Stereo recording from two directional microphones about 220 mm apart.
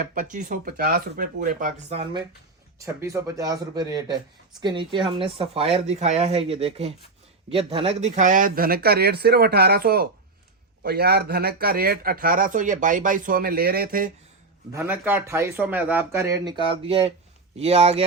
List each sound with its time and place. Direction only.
0.0 s speech: 40° right (ahead or behind)
2.7 s a man's voice: 15° right (ahead or behind); by 14.1 s 40° right (ahead or behind)
14.7 s a man's voice: 10° right (ahead or behind); by 18.0 s 25° right (ahead or behind)